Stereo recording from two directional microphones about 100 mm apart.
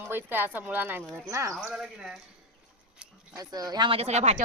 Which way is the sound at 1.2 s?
30° right (ahead or behind).